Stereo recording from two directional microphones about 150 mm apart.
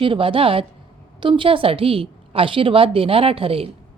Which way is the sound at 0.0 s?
35° right (ahead or behind).